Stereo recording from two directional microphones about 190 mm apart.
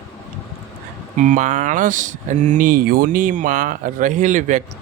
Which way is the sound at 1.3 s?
40° right (ahead or behind).